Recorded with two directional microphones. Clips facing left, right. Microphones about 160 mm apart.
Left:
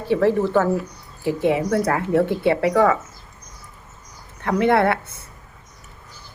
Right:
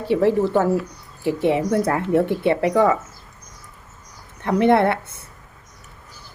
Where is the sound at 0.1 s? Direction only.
15° right (ahead or behind).